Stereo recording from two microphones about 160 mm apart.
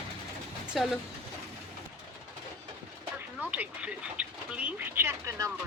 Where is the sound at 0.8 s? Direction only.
Centre (ahead or behind).